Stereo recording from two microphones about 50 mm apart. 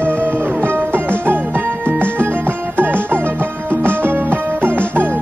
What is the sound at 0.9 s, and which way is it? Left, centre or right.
Music, right.